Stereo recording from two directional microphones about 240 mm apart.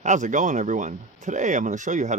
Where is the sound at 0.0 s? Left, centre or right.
Right.